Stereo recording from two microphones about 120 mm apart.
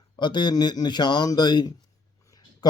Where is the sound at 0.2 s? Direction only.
40° left (ahead or behind).